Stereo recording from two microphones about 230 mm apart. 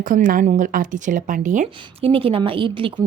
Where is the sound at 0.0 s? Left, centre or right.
Right.